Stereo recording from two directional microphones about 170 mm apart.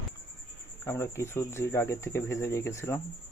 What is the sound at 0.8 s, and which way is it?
Speech, 15° left (ahead or behind).